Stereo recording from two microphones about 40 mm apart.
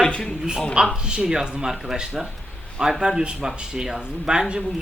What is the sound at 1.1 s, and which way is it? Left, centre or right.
Speech, right.